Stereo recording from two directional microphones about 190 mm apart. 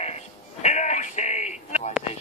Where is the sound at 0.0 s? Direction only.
35° left (ahead or behind).